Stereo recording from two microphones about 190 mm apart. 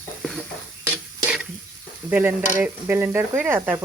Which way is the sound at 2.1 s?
10° right (ahead or behind).